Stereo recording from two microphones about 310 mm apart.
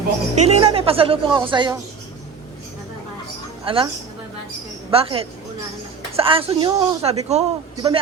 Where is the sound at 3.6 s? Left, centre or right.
Centre.